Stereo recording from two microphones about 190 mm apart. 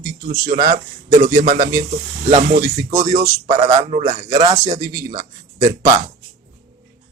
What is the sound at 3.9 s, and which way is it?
Speech, 45° right (ahead or behind).